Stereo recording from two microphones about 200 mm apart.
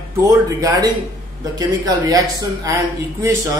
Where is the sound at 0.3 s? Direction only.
20° right (ahead or behind).